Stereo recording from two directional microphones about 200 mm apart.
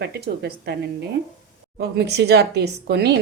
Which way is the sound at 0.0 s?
55° right (ahead or behind).